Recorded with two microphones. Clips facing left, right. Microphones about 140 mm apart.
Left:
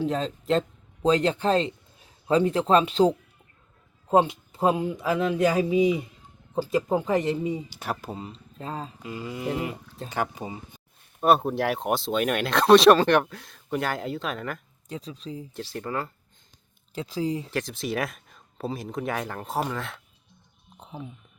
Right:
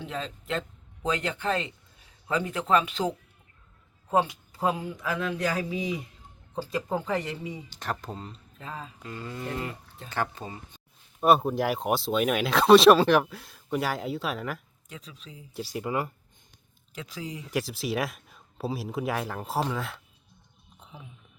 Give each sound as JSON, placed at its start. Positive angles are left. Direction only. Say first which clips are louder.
{"t": 0.0, "sound": "speech", "louder": "left 8 dB", "side_deg": 35}
{"t": 4.1, "sound": "speech", "louder": "left 5 dB", "side_deg": 25}
{"t": 7.7, "sound": "a sound", "louder": "left 2 dB", "side_deg": 10}
{"t": 8.5, "sound": "speech", "louder": "left 6 dB", "side_deg": 35}
{"t": 9.0, "sound": "a sound", "louder": "left 3 dB", "side_deg": 10}
{"t": 11.2, "sound": "speech", "louder": "left 1 dB", "side_deg": 0}
{"t": 14.8, "sound": "speech", "louder": "left 10 dB", "side_deg": 35}
{"t": 15.5, "sound": "speech", "louder": "right 3 dB", "side_deg": -10}
{"t": 16.9, "sound": "speech", "louder": "left 10 dB", "side_deg": 30}
{"t": 17.5, "sound": "speech", "louder": "even", "side_deg": -5}
{"t": 20.7, "sound": "a sound", "louder": "left 9 dB", "side_deg": 35}